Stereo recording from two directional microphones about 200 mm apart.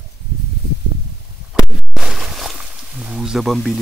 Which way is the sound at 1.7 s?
Centre (ahead or behind).